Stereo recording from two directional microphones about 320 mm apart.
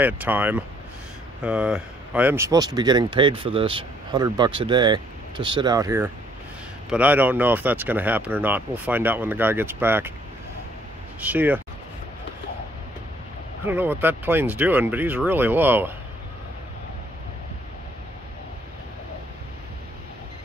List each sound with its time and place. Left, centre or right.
0.0 s speech: centre
11.2 s speech: centre
13.7 s speech: centre